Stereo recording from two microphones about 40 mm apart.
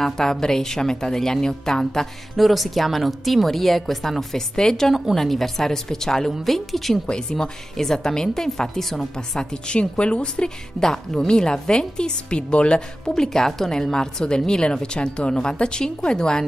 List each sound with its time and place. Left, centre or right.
0.0 s a woman's voice: centre
2.3 s a woman's voice: centre
7.1 s a woman's voice: centre
9.8 s a woman's voice: left
13.1 s a woman's voice: centre